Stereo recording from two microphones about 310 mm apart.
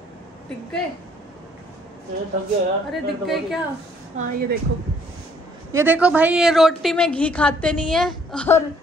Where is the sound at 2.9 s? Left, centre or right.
Centre.